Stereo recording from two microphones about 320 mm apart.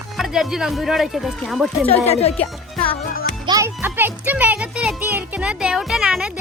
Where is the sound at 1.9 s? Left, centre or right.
Centre.